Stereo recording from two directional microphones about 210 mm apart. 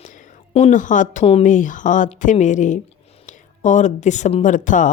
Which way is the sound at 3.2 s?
35° left (ahead or behind).